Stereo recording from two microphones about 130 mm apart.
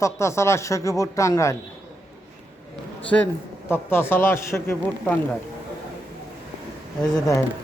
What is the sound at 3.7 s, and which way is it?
Speech, 15° left (ahead or behind).